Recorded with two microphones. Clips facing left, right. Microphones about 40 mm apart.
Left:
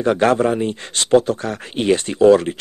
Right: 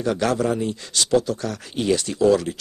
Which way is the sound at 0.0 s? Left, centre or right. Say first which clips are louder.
Left 6 dB; left.